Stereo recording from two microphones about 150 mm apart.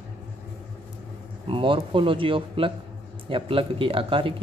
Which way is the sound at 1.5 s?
35° right (ahead or behind).